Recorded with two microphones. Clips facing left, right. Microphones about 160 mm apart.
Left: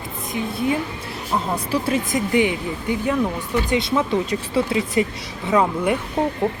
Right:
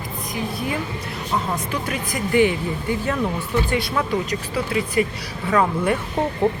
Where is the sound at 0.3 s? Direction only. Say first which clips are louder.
Left 4 dB; 25° left (ahead or behind).